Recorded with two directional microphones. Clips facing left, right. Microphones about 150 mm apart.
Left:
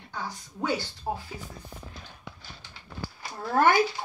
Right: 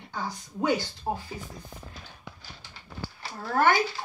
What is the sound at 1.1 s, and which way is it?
Speech, 10° right (ahead or behind).